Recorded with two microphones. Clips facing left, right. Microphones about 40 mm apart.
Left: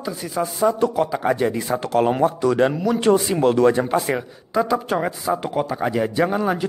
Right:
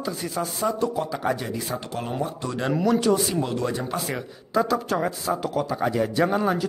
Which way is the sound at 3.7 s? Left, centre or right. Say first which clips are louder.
Left 8 dB; left.